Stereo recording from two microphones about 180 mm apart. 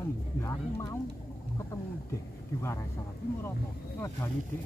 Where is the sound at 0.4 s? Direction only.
15° left (ahead or behind).